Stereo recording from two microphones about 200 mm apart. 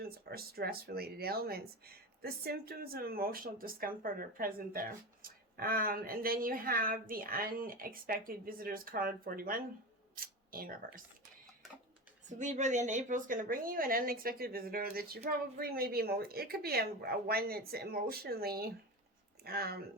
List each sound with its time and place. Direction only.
0.0 s speech: 50° right (ahead or behind)
12.3 s speech: 40° right (ahead or behind)